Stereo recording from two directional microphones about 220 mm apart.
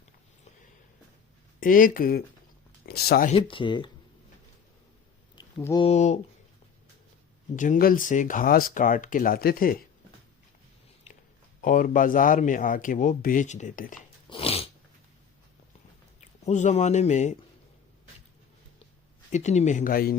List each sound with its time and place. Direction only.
1.5 s speech: 40° left (ahead or behind)
3.3 s speech: 25° left (ahead or behind)
5.5 s speech: 10° left (ahead or behind)
5.8 s speech: 30° left (ahead or behind)
7.5 s speech: 35° left (ahead or behind)
11.6 s speech: 35° left (ahead or behind)
14.3 s sneeze: 25° left (ahead or behind)
16.5 s speech: 30° left (ahead or behind)
19.3 s speech: 30° left (ahead or behind)